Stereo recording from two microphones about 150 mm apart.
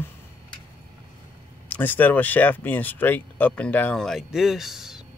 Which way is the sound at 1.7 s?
10° left (ahead or behind).